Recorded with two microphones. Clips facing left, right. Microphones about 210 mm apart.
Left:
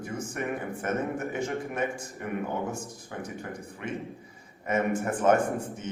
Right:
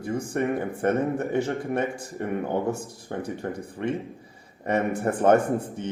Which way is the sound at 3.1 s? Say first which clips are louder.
Right 7 dB; 40° right (ahead or behind).